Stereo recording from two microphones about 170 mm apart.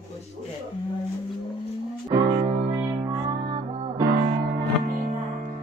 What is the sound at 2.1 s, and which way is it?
Music, 20° right (ahead or behind).